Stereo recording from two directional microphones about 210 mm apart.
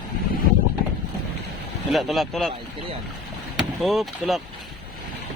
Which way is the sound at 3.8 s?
Centre (ahead or behind).